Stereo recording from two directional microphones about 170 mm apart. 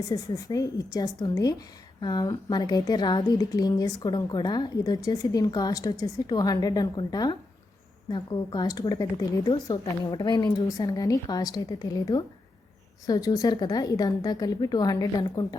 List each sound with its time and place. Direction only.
0.0 s a woman's voice: 20° left (ahead or behind)